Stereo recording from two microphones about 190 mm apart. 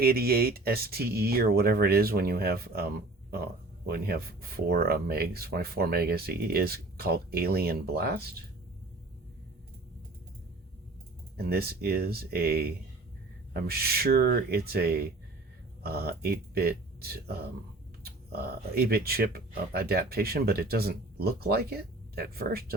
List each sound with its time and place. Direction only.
0.0 s speech: 55° right (ahead or behind)
11.3 s speech: 55° right (ahead or behind)